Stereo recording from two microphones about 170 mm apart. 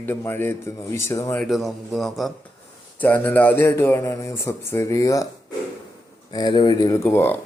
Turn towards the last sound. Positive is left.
turn(degrees=10)  # may be behind; listen again after turning